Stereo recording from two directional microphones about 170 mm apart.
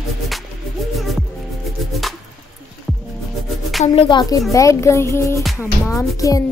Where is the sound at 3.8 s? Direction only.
30° left (ahead or behind).